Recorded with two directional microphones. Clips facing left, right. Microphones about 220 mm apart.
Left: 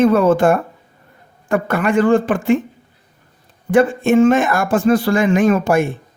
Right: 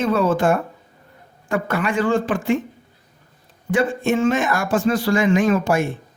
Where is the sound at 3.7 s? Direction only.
55° left (ahead or behind).